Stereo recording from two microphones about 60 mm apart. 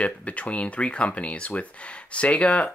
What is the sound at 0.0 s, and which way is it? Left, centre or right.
Speech, left.